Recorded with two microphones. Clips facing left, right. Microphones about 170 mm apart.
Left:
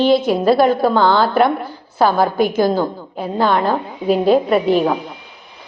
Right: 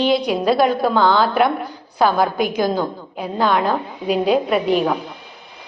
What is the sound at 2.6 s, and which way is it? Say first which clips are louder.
A woman's voice: left 3 dB; 5° left (ahead or behind).